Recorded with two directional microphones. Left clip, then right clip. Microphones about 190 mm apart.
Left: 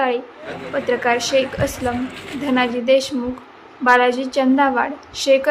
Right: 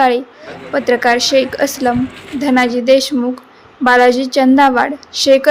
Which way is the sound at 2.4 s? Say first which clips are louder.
Right 6 dB; 30° right (ahead or behind).